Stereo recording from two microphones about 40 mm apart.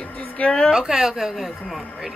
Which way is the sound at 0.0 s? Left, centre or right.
Left.